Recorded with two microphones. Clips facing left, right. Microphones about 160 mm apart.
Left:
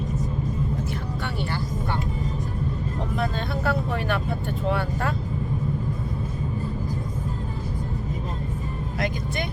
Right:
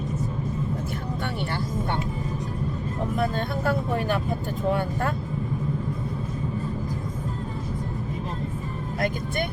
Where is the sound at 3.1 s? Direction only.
50° right (ahead or behind).